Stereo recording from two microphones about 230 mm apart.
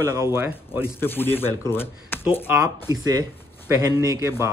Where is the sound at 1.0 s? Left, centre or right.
Centre.